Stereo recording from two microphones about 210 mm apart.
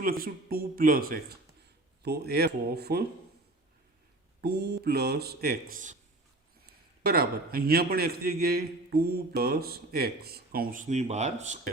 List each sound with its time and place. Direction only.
0.0 s a man's voice: 45° right (ahead or behind)
4.4 s a man's voice: 50° right (ahead or behind)
7.0 s a man's voice: 45° right (ahead or behind)